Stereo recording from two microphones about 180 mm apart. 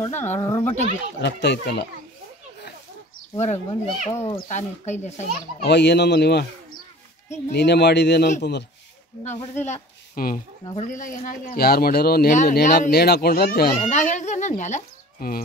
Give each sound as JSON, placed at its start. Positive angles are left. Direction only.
{"t": 0.0, "sound": "speech", "side_deg": 10}
{"t": 1.2, "sound": "speech", "side_deg": 75}
{"t": 3.3, "sound": "speech", "side_deg": 40}
{"t": 5.6, "sound": "speech", "side_deg": 70}
{"t": 7.5, "sound": "speech", "side_deg": 70}
{"t": 9.7, "sound": "speech", "side_deg": 50}
{"t": 10.6, "sound": "speech", "side_deg": 25}
{"t": 10.9, "sound": "speech", "side_deg": 45}
{"t": 12.4, "sound": "speech", "side_deg": 45}
{"t": 13.8, "sound": "speech", "side_deg": 40}